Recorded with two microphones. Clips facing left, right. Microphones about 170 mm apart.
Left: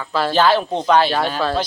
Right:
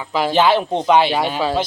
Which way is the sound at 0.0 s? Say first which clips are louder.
Right 1 dB; 15° right (ahead or behind).